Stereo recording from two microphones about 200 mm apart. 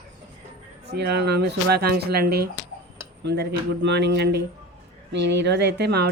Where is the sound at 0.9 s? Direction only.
55° right (ahead or behind).